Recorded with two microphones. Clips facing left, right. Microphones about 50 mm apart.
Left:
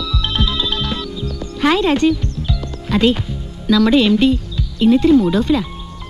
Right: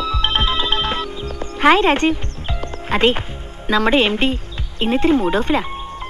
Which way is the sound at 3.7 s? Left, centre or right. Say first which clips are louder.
Left 3 dB; right.